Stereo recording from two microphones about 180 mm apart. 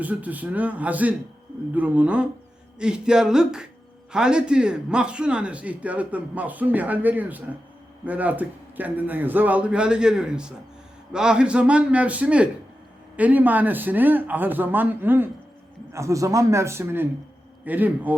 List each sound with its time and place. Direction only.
0.0 s a man's voice: 10° right (ahead or behind)
2.7 s a sound: 5° right (ahead or behind)
4.1 s a man's voice: 5° right (ahead or behind)